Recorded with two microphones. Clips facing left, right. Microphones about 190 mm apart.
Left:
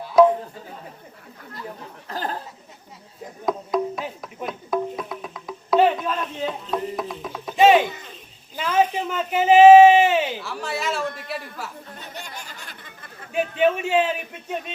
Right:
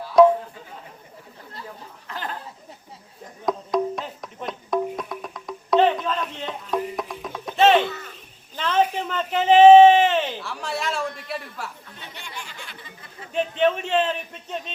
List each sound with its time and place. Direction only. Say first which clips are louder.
0.2 s music: right 1 dB; centre (ahead or behind)
2.0 s a sound: left 4 dB; 40° left (ahead or behind)
3.4 s music: even; centre (ahead or behind)
7.5 s a sound: left 2 dB; 10° left (ahead or behind)
11.3 s speech: even; centre (ahead or behind)
11.9 s chatter: even; 45° left (ahead or behind)
13.6 s a man's voice: left 2 dB; 10° left (ahead or behind)